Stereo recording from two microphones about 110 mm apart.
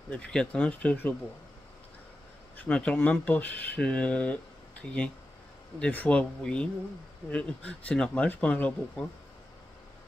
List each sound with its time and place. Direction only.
0.1 s speech: 10° left (ahead or behind)
2.5 s speech: 10° left (ahead or behind)